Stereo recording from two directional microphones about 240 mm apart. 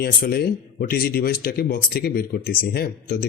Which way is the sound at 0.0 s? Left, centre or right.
Left.